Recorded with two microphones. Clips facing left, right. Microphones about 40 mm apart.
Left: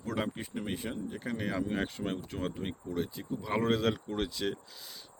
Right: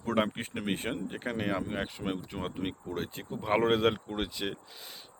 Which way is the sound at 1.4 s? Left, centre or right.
Right.